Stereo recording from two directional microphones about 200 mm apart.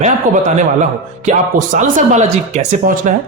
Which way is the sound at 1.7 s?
40° right (ahead or behind).